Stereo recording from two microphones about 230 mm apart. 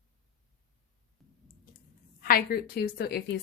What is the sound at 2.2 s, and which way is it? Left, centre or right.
Speech, left.